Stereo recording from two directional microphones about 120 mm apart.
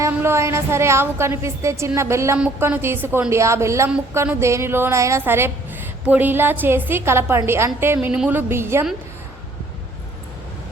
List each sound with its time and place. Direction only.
0.0 s a woman's voice: 20° right (ahead or behind)